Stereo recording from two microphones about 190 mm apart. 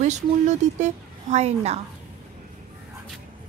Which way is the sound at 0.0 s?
40° right (ahead or behind).